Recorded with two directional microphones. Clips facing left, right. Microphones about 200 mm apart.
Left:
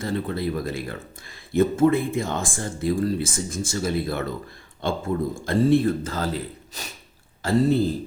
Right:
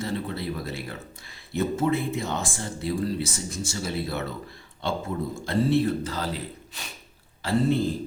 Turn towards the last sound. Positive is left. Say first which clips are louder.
# left 3 dB
turn(degrees=45)  # may be behind; listen again after turning